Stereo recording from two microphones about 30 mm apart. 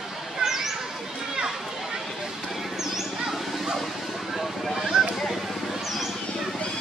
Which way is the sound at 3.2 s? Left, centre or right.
Centre.